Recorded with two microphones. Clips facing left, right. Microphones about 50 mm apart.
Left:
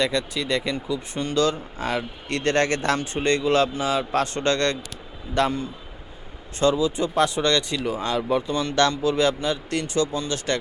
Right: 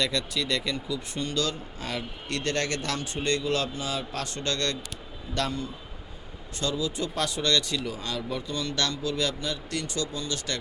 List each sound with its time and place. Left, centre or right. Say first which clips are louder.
0.0 s a man's voice: left 4 dB; left